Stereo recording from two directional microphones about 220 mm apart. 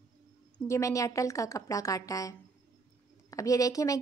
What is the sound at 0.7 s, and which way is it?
A woman's voice, 15° left (ahead or behind).